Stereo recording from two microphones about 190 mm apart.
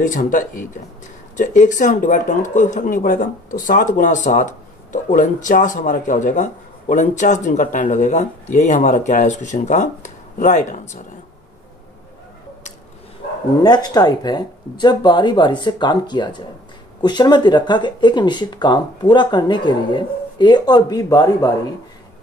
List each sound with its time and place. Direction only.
0.0 s speech: 45° left (ahead or behind)
13.6 s speech: 20° left (ahead or behind)